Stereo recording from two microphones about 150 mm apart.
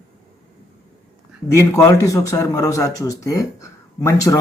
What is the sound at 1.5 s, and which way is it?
Speech, 20° left (ahead or behind).